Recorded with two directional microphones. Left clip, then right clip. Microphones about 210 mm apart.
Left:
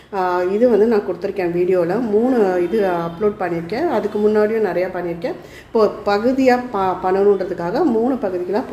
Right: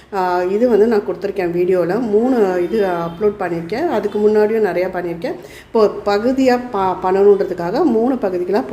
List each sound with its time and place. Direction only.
0.2 s a woman's voice: 10° right (ahead or behind)